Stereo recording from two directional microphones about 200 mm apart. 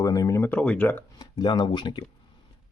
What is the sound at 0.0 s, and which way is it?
Speech, 20° left (ahead or behind).